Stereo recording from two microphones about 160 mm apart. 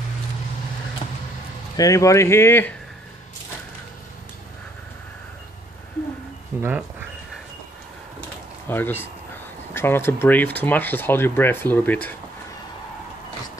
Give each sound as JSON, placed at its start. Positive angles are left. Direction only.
{"t": 1.8, "sound": "speech", "side_deg": 20}
{"t": 6.6, "sound": "speech", "side_deg": -10}
{"t": 8.6, "sound": "speech", "side_deg": 15}